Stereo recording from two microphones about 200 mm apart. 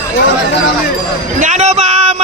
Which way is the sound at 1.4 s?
35° right (ahead or behind).